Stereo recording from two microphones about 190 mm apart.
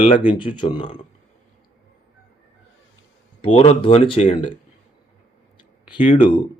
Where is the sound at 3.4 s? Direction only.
30° left (ahead or behind).